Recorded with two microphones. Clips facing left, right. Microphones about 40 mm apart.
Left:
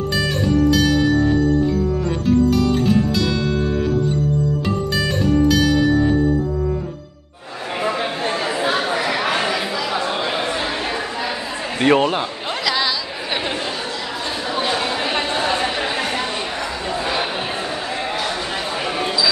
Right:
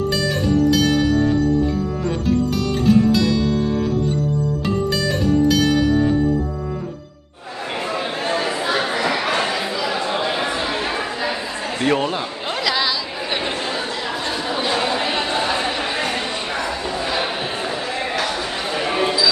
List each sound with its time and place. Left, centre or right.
2.2 s music: centre
8.3 s a sound: centre
10.5 s chatter: centre
11.8 s a man's voice: left
12.6 s chatter: centre
14.5 s chatter: centre
15.6 s a sound: centre
18.9 s single-lens reflex camera: right